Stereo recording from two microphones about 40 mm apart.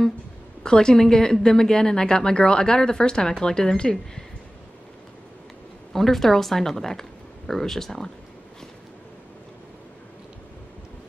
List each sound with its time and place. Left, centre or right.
0.7 s speech: centre
5.9 s speech: centre